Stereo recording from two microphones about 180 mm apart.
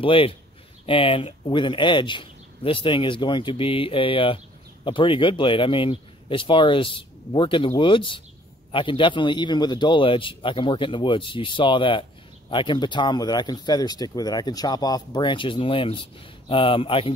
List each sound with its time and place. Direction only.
0.0 s a man's voice: 30° left (ahead or behind)